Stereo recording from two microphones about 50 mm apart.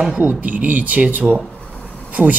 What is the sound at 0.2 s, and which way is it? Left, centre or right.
Speech, right.